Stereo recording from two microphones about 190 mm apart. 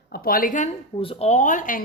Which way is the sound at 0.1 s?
50° left (ahead or behind).